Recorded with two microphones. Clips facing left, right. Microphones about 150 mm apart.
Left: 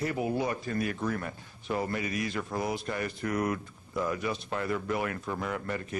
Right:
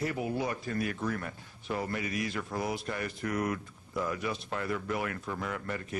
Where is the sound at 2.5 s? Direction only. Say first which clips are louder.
Left 2 dB; 45° left (ahead or behind).